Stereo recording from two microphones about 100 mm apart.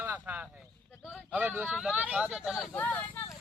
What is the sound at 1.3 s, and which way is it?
Vehicle, 15° right (ahead or behind).